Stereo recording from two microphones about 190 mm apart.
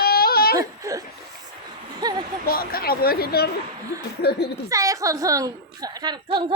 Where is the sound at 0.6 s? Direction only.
15° right (ahead or behind).